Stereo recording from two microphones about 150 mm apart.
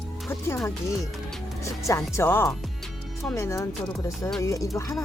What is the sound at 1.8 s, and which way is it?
Speech, 20° left (ahead or behind).